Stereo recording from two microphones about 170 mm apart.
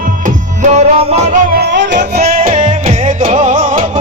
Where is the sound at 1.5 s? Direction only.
80° right.